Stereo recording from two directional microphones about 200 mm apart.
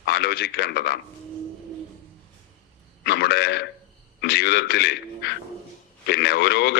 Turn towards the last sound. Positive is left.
turn(degrees=55)  # may be behind; listen again after turning